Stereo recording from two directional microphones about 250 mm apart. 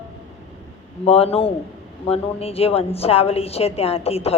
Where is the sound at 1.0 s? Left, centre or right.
Left.